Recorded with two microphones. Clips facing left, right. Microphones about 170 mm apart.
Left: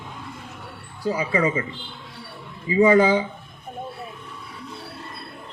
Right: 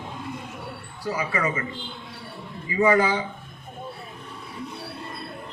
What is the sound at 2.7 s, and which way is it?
Speech, 25° left (ahead or behind).